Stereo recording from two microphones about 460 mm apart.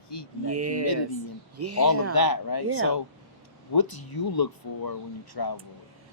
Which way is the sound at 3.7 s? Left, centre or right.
Left.